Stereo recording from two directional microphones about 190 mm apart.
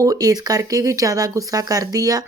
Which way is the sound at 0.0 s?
20° right (ahead or behind).